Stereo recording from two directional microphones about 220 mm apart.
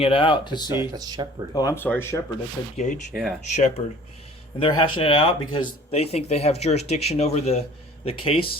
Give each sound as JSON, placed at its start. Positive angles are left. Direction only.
{"t": 0.0, "sound": "speech", "side_deg": 25}
{"t": 0.9, "sound": "speech", "side_deg": -15}
{"t": 1.5, "sound": "speech", "side_deg": 15}
{"t": 2.7, "sound": "speech", "side_deg": 35}
{"t": 3.1, "sound": "speech", "side_deg": 0}
{"t": 3.5, "sound": "speech", "side_deg": 30}